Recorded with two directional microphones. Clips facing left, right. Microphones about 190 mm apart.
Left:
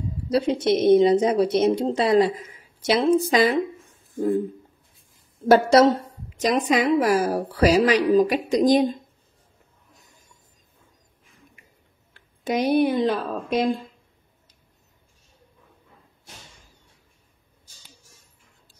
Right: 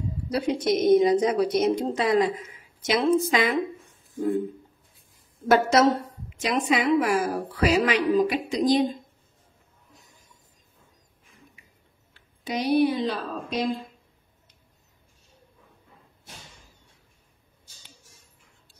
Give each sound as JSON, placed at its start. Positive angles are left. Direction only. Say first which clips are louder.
{"t": 0.3, "sound": "a woman's voice", "louder": "left 4 dB", "side_deg": 25}
{"t": 5.5, "sound": "a woman's voice", "louder": "left 4 dB", "side_deg": 35}
{"t": 12.1, "sound": "speech", "louder": "left 6 dB", "side_deg": 50}